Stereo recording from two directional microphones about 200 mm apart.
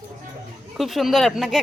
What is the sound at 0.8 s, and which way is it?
Speech, centre (ahead or behind).